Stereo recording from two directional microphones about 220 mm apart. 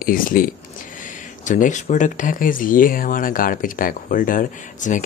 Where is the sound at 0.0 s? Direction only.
40° left (ahead or behind).